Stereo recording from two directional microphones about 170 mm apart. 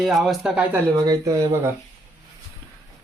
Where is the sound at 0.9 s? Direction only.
20° right (ahead or behind).